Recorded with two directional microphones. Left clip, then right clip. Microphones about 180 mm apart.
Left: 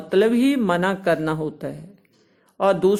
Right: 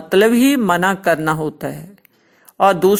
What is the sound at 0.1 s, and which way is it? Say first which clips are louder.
Speech: right 5 dB; 40° right (ahead or behind).